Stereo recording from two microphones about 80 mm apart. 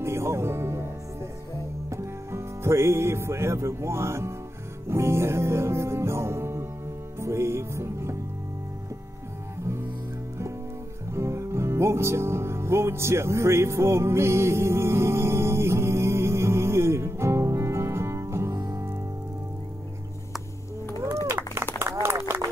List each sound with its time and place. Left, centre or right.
0.0 s music: right
1.9 s music: right
11.1 s music: right
21.3 s run: right